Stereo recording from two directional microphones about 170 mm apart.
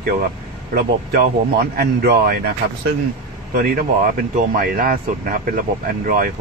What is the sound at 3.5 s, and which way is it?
Speech, 60° right (ahead or behind).